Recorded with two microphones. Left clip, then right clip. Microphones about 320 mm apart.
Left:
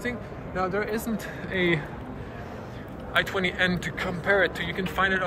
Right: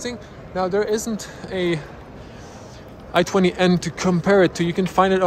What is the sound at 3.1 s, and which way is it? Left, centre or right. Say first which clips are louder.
Speech: right 6 dB; centre.